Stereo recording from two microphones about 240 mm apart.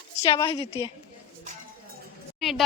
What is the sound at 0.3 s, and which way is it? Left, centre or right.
Speech, centre.